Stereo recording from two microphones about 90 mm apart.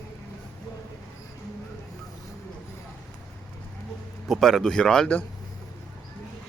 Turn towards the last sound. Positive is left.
turn(degrees=10)  # may be behind; listen again after turning